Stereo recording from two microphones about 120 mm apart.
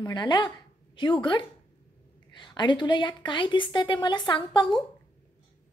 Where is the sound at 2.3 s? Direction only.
40° left (ahead or behind).